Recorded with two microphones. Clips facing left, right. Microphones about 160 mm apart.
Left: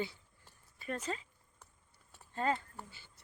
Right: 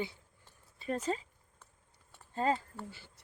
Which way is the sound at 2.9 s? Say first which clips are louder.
Right 8 dB; 70° right (ahead or behind).